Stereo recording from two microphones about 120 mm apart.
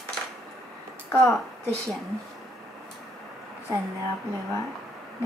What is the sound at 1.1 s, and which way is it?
Speech, 10° left (ahead or behind).